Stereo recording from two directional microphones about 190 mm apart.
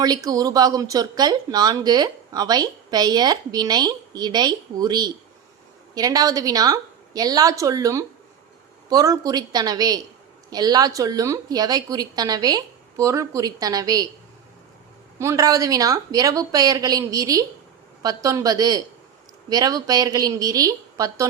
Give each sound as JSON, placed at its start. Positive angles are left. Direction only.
{"t": 0.0, "sound": "a woman's voice", "side_deg": -20}
{"t": 15.2, "sound": "a woman's voice", "side_deg": -15}